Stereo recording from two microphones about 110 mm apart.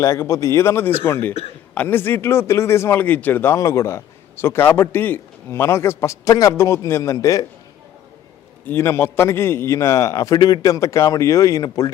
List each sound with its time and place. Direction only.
0.0 s speech: 30° left (ahead or behind)
8.6 s speech: 20° left (ahead or behind)